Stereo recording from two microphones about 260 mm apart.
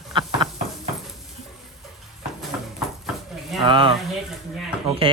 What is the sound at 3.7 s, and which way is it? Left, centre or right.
Speech, centre.